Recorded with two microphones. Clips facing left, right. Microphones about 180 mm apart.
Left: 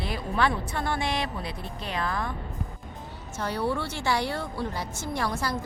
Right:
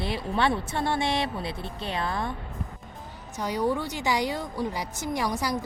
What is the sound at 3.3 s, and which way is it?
A woman's voice, 15° right (ahead or behind).